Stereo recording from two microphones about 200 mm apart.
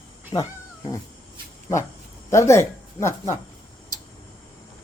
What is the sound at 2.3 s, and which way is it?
Speech, 15° left (ahead or behind).